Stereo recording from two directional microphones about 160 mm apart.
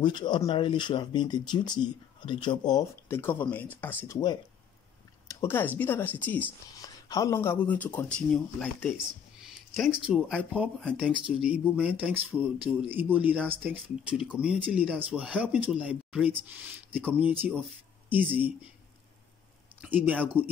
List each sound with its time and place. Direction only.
0.0 s speech: 30° left (ahead or behind)
3.1 s speech: 15° left (ahead or behind)
5.3 s speech: 15° left (ahead or behind)
6.8 s speech: 20° left (ahead or behind); by 8.9 s 5° left (ahead or behind)
9.4 s a sound: 5° right (ahead or behind)
10.5 s speech: 5° right (ahead or behind)
19.8 s speech: 10° right (ahead or behind)